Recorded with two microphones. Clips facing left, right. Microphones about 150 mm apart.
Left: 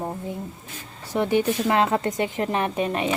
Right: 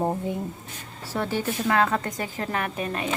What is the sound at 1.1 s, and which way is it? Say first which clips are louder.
A woman's voice: left 6 dB; 20° left (ahead or behind).